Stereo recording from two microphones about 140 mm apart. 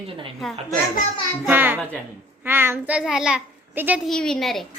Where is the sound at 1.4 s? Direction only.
15° right (ahead or behind).